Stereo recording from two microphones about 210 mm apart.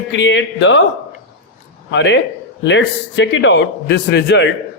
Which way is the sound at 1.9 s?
60° left (ahead or behind).